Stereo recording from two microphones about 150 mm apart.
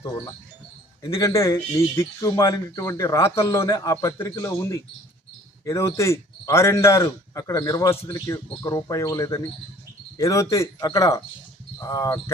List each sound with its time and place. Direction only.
1.1 s speech: 20° left (ahead or behind)